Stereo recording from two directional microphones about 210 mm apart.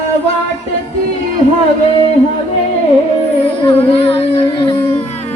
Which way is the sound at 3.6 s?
25° left (ahead or behind).